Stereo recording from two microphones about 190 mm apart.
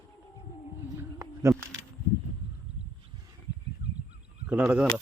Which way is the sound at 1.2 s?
15° right (ahead or behind).